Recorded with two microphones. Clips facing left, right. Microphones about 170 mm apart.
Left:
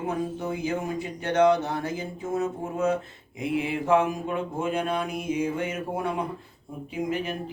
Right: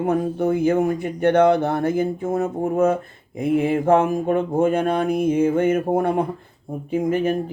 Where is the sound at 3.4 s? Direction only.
50° right (ahead or behind).